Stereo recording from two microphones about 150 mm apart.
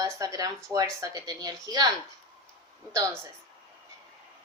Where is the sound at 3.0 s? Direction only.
20° right (ahead or behind).